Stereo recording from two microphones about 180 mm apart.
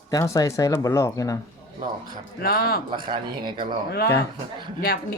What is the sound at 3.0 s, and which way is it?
Speech, 25° right (ahead or behind).